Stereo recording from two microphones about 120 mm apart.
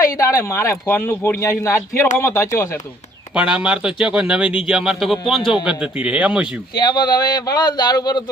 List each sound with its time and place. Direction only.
0.0 s speech: 30° left (ahead or behind)
3.3 s speech: 10° right (ahead or behind)
6.7 s speech: 35° left (ahead or behind)